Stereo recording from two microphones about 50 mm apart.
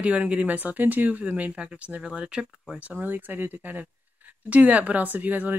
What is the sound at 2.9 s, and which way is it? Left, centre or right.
Speech, right.